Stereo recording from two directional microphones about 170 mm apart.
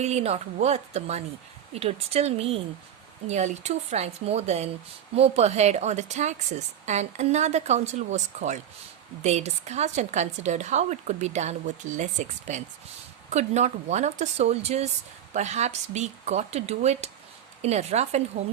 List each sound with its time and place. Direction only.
0.0 s a woman's voice: 40° right (ahead or behind)